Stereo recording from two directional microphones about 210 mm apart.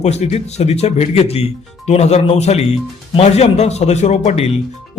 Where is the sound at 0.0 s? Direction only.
30° left (ahead or behind).